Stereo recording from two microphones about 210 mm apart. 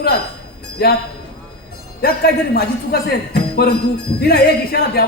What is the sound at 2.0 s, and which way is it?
Speech, 50° left (ahead or behind).